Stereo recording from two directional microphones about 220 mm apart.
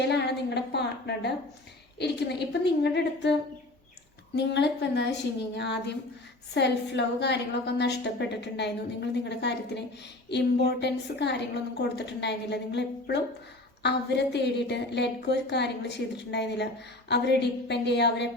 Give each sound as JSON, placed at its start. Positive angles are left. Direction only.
{"t": 0.0, "sound": "a woman's voice", "side_deg": 50}
{"t": 4.4, "sound": "a woman's voice", "side_deg": 50}
{"t": 6.5, "sound": "a woman's voice", "side_deg": 50}